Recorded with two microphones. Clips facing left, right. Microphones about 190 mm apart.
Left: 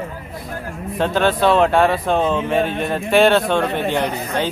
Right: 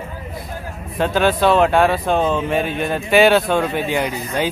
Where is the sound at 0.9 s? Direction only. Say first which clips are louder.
Right 1 dB; 5° right (ahead or behind).